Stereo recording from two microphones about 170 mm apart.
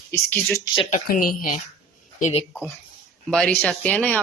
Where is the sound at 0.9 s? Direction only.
50° left (ahead or behind).